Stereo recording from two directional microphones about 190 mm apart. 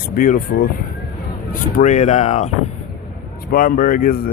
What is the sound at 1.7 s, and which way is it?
Speech, 40° left (ahead or behind).